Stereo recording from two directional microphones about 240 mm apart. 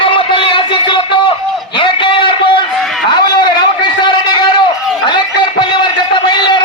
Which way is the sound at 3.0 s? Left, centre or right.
Centre.